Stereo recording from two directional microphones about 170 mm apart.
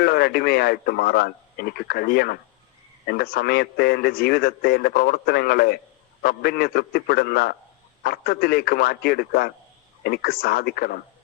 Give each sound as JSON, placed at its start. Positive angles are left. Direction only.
{"t": 0.0, "sound": "a man's voice", "side_deg": 65}